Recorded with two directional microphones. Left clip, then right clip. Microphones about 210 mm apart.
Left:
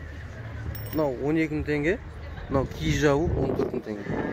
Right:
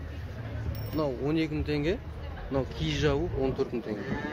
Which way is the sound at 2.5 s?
45° left (ahead or behind).